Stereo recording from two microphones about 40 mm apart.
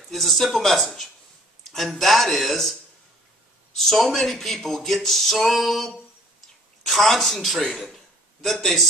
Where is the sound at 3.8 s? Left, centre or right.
Centre.